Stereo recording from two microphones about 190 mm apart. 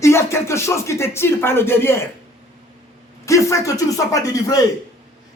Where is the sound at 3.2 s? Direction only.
15° left (ahead or behind).